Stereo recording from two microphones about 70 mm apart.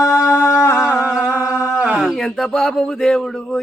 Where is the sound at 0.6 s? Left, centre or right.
Left.